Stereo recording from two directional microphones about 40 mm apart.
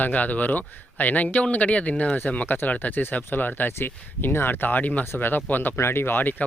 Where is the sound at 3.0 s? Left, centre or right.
Left.